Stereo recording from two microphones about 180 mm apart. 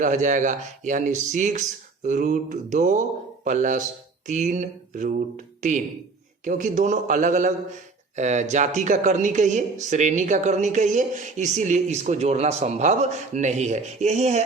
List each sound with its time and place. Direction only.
0.0 s a woman's voice: 45° right (ahead or behind)